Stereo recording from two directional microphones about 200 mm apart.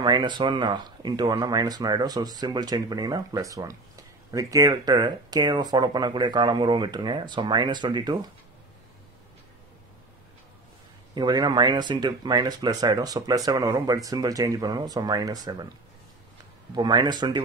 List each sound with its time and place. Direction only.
0.0 s speech: 20° right (ahead or behind)
11.1 s speech: 20° right (ahead or behind)
16.7 s speech: 20° right (ahead or behind)